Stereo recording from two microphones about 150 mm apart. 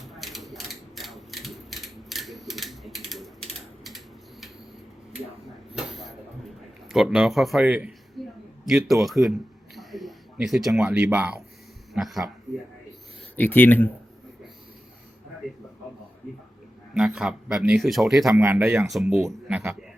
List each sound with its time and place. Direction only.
0.2 s mechanisms: centre (ahead or behind)
5.7 s a sound: centre (ahead or behind)
6.8 s speech: 5° right (ahead or behind)
8.2 s a sound: centre (ahead or behind)
10.8 s speech: 10° right (ahead or behind)
11.9 s speech: centre (ahead or behind)
13.3 s speech: 15° left (ahead or behind)
16.9 s speech: 5° right (ahead or behind)
18.3 s speech: 15° right (ahead or behind)
19.5 s speech: 10° right (ahead or behind)